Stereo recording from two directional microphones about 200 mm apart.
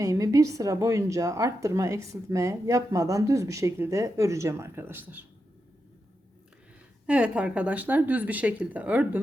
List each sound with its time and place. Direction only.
0.0 s a woman's voice: 15° right (ahead or behind)
7.1 s a woman's voice: 5° right (ahead or behind)